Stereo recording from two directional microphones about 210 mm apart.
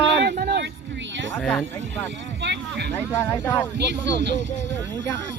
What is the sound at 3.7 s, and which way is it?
Speech, 55° right (ahead or behind).